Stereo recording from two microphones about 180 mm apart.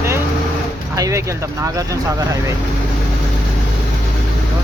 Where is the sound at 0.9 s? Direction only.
20° right (ahead or behind).